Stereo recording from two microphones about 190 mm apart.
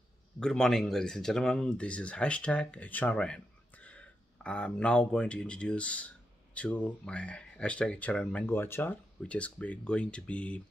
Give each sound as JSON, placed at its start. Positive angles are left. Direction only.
{"t": 0.4, "sound": "speech", "side_deg": 5}